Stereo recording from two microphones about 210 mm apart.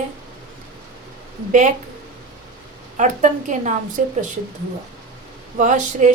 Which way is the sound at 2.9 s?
35° right (ahead or behind).